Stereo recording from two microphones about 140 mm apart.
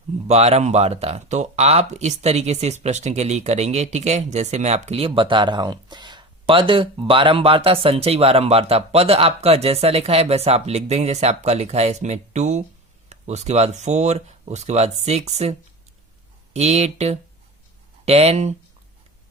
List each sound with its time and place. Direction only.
0.3 s speech: 50° right (ahead or behind)